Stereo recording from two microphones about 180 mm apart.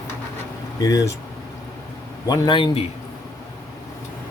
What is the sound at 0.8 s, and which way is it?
Speech, 20° left (ahead or behind).